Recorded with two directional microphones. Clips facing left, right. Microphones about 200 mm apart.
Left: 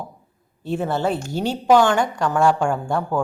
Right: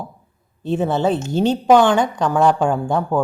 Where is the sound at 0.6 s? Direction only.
20° right (ahead or behind).